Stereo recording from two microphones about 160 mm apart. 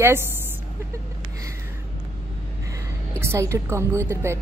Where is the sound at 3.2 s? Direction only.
15° right (ahead or behind).